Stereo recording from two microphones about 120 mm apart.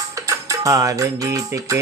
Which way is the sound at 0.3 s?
25° right (ahead or behind).